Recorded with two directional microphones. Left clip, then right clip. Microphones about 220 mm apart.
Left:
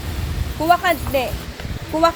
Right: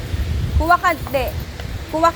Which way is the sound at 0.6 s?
15° left (ahead or behind).